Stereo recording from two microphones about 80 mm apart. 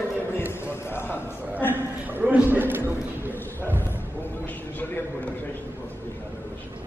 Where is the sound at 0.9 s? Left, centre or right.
Left.